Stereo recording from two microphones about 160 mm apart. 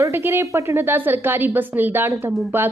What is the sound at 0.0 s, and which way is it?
Speech, 15° right (ahead or behind).